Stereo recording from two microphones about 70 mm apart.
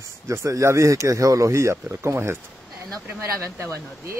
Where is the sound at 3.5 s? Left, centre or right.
Right.